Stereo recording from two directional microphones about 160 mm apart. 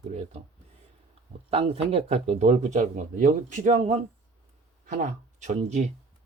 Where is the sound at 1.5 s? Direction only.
40° right (ahead or behind).